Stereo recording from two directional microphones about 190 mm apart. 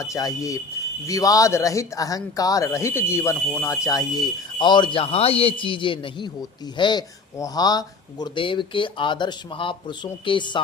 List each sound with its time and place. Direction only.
0.0 s speech: 15° left (ahead or behind)